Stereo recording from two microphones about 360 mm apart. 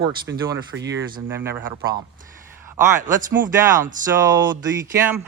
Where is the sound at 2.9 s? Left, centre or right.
Right.